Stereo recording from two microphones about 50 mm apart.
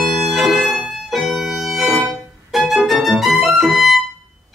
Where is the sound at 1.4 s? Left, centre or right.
Centre.